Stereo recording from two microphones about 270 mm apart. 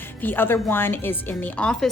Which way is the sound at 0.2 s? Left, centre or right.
Centre.